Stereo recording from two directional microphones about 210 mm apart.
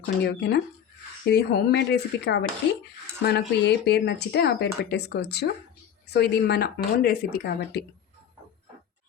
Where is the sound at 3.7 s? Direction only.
50° left (ahead or behind).